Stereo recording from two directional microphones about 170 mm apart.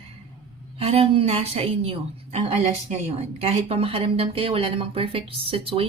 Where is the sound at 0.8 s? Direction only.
35° right (ahead or behind).